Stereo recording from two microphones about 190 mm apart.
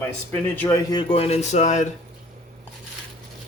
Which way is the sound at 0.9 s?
25° left (ahead or behind).